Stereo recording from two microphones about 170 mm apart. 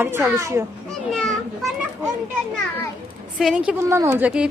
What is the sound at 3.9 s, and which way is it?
Speech, 15° right (ahead or behind).